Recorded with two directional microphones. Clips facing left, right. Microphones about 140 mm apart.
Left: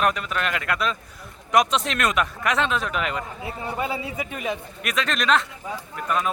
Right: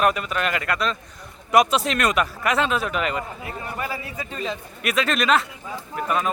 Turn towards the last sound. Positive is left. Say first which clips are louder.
# right 1 dB
turn(degrees=-5)  # may be behind; listen again after turning